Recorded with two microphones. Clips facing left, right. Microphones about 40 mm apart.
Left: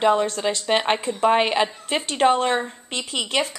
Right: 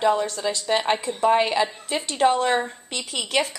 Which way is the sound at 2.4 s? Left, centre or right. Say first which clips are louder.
Even; centre.